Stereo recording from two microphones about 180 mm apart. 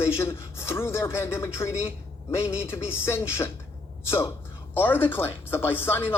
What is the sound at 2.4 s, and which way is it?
Speech, 5° right (ahead or behind).